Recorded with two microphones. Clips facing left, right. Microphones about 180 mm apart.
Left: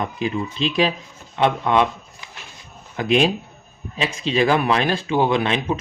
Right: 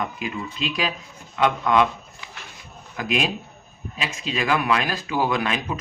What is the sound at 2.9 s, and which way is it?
Speech, 30° left (ahead or behind).